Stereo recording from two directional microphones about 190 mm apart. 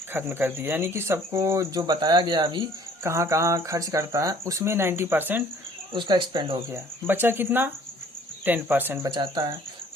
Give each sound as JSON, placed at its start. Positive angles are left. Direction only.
{"t": 0.1, "sound": "speech", "side_deg": -10}
{"t": 5.9, "sound": "speech", "side_deg": -25}
{"t": 7.1, "sound": "speech", "side_deg": -10}
{"t": 9.1, "sound": "speech", "side_deg": -20}